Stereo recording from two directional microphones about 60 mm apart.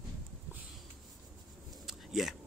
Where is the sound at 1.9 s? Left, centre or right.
Centre.